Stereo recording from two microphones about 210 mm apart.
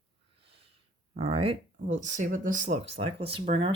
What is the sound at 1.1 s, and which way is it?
Speech, 25° right (ahead or behind).